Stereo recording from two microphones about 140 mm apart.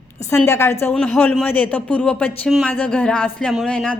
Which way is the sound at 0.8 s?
5° left (ahead or behind).